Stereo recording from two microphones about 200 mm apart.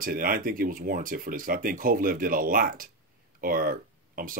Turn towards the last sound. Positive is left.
turn(degrees=-45)  # may be behind; listen again after turning